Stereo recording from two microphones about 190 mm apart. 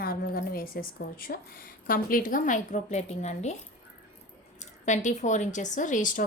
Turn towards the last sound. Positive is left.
turn(degrees=45)  # may be behind; listen again after turning